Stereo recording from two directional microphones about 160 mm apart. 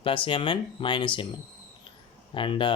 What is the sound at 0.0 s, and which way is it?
Speech, 35° left (ahead or behind).